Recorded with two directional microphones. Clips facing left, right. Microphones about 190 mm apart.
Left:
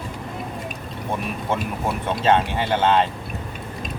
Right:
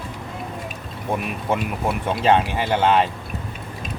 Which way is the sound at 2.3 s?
15° right (ahead or behind).